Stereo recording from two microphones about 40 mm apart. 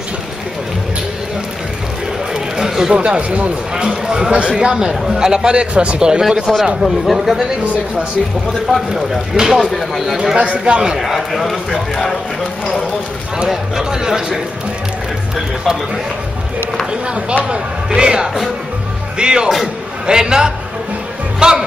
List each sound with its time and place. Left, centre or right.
2.5 s chatter: centre
2.9 s speech: right
3.7 s speech: centre
6.4 s speech: centre
8.7 s a man's voice: centre
9.8 s speech: centre
10.1 s speech: centre
10.4 s speech: right
11.0 s speech: centre
13.5 s a man's voice: centre
17.5 s a man's voice: right